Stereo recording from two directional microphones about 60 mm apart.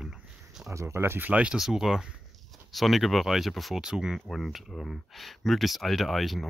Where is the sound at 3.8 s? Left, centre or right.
Centre.